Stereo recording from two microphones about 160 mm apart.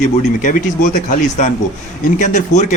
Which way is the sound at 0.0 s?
50° left (ahead or behind).